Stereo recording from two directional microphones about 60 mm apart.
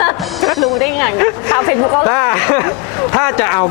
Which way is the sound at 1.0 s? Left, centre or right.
Left.